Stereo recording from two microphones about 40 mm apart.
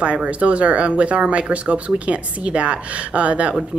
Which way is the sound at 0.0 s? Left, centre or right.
Right.